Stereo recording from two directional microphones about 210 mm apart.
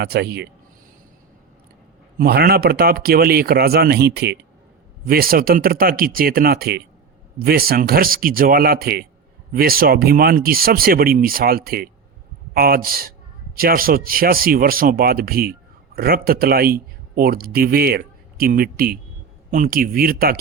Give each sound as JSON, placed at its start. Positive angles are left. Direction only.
{"t": 0.0, "sound": "speech", "side_deg": -50}
{"t": 2.1, "sound": "speech", "side_deg": -45}